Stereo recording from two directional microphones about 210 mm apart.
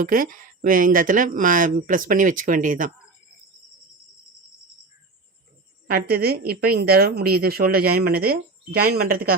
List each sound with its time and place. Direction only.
0.0 s speech: 40° right (ahead or behind)
5.9 s a woman's voice: 45° right (ahead or behind)